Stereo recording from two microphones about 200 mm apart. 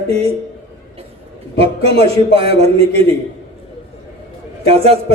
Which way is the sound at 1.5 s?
30° right (ahead or behind).